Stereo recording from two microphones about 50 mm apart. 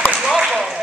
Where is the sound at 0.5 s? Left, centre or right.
Centre.